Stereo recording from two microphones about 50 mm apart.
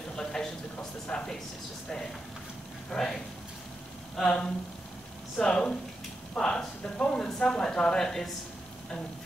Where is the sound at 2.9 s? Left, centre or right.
Centre.